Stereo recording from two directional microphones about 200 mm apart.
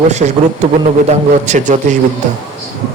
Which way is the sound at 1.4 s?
35° right (ahead or behind).